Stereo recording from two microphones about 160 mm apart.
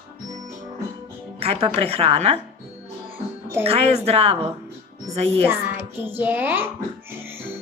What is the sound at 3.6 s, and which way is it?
Speech, 40° right (ahead or behind).